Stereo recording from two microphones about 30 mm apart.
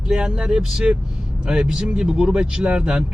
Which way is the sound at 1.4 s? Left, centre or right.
Right.